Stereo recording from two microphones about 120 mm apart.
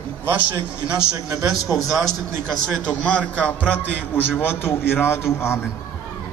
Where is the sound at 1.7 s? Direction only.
Centre (ahead or behind); by 5.6 s 20° left (ahead or behind).